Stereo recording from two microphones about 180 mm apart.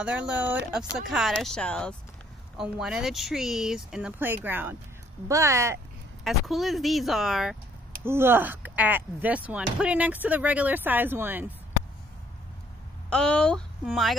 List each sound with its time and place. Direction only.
0.0 s speech: 5° right (ahead or behind)
6.2 s speech: centre (ahead or behind)
8.0 s speech: 15° right (ahead or behind)
13.1 s speech: 5° left (ahead or behind)